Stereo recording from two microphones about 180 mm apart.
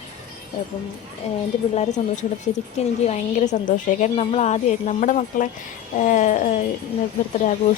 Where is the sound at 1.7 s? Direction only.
40° left (ahead or behind).